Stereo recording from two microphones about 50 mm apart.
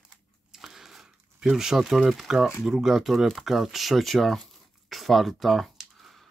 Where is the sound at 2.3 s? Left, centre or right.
Centre.